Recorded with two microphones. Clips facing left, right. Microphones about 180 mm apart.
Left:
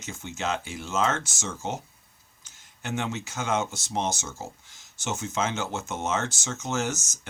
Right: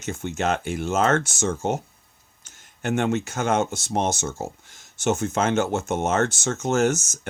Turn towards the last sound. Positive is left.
turn(degrees=-55)  # may be behind; listen again after turning